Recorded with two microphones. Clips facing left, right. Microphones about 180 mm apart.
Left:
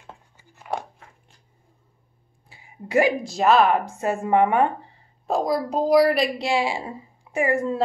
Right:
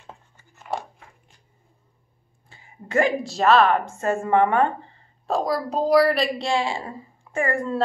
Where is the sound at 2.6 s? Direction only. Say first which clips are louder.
Left 1 dB; 10° left (ahead or behind).